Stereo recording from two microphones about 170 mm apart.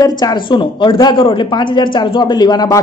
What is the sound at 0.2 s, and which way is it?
Speech, 25° left (ahead or behind).